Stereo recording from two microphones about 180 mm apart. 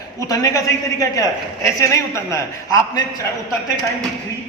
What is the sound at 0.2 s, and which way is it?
A man's voice, 20° left (ahead or behind).